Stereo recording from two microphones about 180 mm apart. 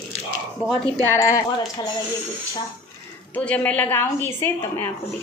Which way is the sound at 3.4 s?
10° left (ahead or behind).